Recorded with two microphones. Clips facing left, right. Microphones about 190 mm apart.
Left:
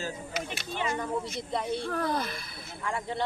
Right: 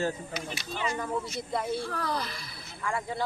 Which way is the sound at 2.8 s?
20° left (ahead or behind).